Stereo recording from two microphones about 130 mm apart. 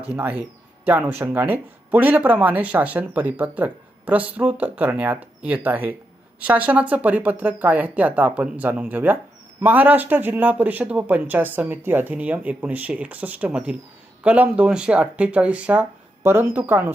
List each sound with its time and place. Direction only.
0.2 s speech: 10° right (ahead or behind)